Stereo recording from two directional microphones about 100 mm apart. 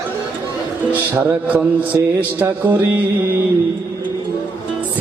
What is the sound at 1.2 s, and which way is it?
Speech, 15° right (ahead or behind).